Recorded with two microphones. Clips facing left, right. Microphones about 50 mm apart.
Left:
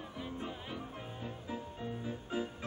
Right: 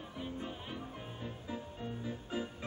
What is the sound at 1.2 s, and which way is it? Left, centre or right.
Music, centre.